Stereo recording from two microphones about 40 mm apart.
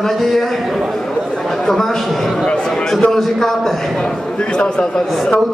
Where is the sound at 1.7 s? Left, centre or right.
Centre.